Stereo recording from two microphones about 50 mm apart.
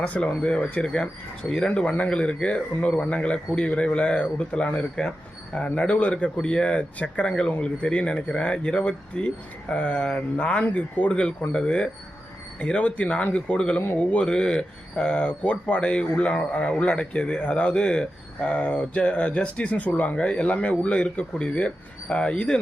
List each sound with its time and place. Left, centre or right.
0.1 s speech: left
11.1 s speech: centre